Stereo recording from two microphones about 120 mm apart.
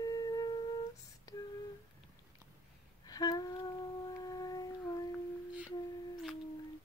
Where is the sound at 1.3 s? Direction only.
30° left (ahead or behind).